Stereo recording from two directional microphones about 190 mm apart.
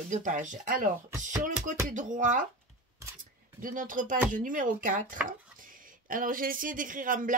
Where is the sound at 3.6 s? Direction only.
45° right (ahead or behind).